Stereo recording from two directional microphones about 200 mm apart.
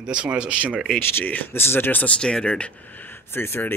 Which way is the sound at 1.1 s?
10° left (ahead or behind).